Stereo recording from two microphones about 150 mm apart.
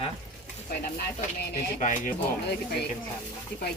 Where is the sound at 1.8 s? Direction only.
55° left (ahead or behind).